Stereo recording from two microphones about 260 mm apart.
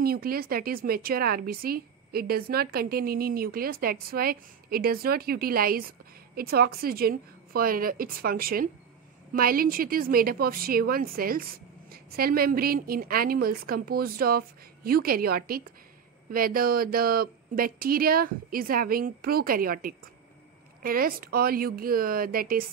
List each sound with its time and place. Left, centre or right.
0.0 s speech: right